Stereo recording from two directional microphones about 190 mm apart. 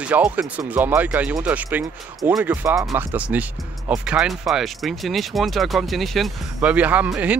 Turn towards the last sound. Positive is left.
turn(degrees=-5)  # may be behind; listen again after turning